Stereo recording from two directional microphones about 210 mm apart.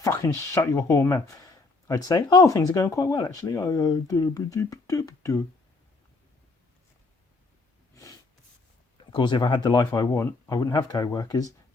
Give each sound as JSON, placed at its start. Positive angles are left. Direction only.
{"t": 0.0, "sound": "speech", "side_deg": 15}
{"t": 9.1, "sound": "speech", "side_deg": 20}